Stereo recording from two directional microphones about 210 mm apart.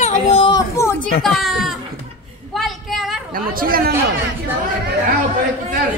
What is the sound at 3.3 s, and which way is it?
Speech, 40° right (ahead or behind).